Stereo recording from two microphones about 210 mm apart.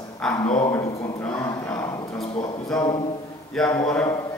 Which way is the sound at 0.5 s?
15° left (ahead or behind).